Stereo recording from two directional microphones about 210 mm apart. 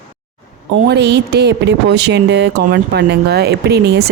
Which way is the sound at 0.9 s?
55° right (ahead or behind).